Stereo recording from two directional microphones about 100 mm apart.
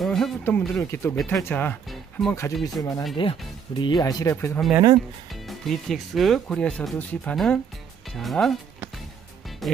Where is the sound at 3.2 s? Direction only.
55° left (ahead or behind).